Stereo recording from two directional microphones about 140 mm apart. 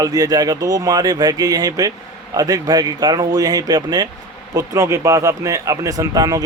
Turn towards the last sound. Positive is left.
turn(degrees=-25)  # may be behind; listen again after turning